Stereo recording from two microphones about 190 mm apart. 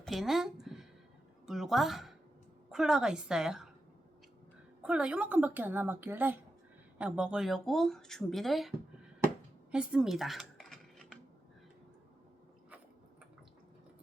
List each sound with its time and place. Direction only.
0.0 s a sound: centre (ahead or behind)
1.5 s a woman's voice: centre (ahead or behind)
4.8 s a woman's voice: 5° right (ahead or behind)
9.7 s typing: 5° right (ahead or behind)